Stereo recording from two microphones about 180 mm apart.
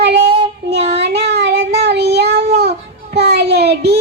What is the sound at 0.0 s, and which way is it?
Child singing, 65° right (ahead or behind).